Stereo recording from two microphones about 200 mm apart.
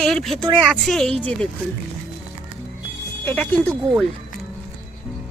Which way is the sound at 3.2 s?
10° left (ahead or behind).